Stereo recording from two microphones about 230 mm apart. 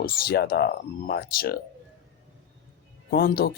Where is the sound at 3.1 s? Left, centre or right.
Left.